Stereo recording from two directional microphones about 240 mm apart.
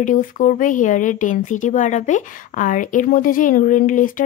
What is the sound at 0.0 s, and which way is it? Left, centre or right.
Speech, left.